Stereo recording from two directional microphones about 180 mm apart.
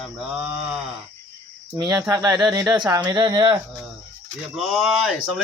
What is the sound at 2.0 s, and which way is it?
Speech, 15° right (ahead or behind).